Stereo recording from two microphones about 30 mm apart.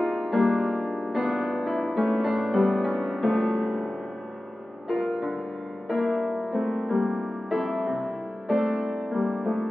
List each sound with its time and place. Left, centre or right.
0.0 s music: centre
5.0 s music: centre